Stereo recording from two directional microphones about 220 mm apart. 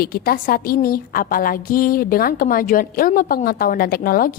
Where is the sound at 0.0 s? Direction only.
45° left (ahead or behind).